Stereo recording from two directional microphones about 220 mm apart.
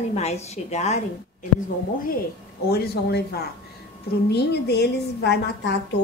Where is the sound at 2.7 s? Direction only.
45° left (ahead or behind).